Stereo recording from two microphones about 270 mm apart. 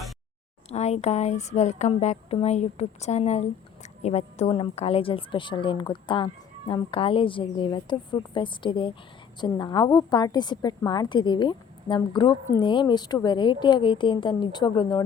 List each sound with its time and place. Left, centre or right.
0.7 s a woman's voice: left